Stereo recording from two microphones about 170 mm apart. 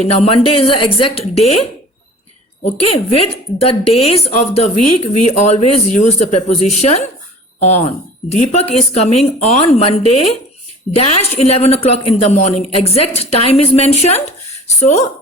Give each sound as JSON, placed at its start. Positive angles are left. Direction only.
{"t": 0.0, "sound": "a woman's voice", "side_deg": 40}
{"t": 2.6, "sound": "a woman's voice", "side_deg": 35}